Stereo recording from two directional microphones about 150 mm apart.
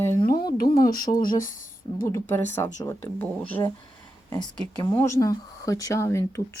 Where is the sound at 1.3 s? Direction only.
65° left (ahead or behind).